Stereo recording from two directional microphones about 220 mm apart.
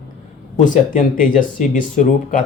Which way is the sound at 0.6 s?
35° left (ahead or behind).